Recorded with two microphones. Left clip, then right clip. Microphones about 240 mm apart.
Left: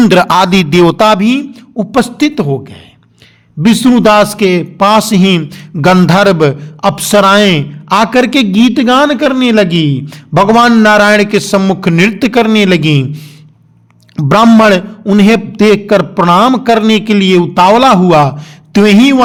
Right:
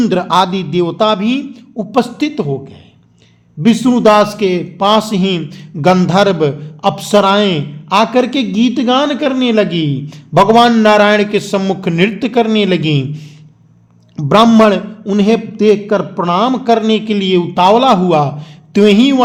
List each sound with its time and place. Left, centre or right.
0.0 s a man's voice: left
3.6 s a man's voice: left